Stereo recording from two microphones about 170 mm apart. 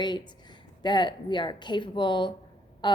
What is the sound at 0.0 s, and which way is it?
A woman's voice, 25° left (ahead or behind).